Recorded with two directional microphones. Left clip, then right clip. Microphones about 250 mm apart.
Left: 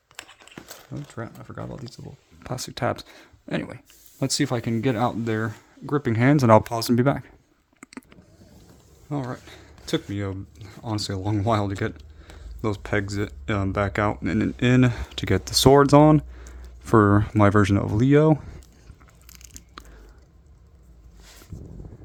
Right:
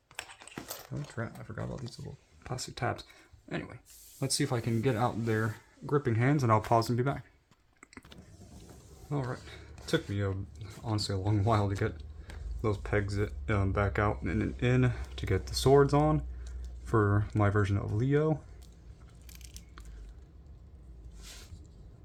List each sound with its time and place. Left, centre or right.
0.2 s a sound: centre
1.1 s speech: left
2.4 s speech: left
9.0 s speech: left
19.8 s biting: left